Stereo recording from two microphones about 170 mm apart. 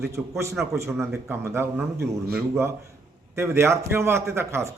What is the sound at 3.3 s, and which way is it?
A man's voice, 15° right (ahead or behind).